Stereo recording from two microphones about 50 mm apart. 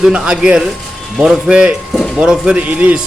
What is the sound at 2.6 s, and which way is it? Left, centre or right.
Speech, right.